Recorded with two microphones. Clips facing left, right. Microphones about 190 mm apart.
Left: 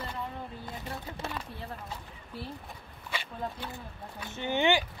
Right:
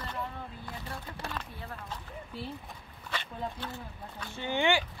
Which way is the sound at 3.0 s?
10° left (ahead or behind).